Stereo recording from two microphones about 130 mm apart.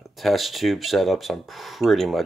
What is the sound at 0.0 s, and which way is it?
Speech, centre (ahead or behind).